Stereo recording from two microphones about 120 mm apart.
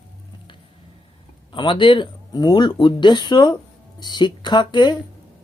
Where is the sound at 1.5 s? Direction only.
40° left (ahead or behind).